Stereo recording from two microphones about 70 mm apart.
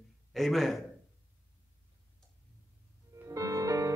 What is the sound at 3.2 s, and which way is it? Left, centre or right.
Music, right.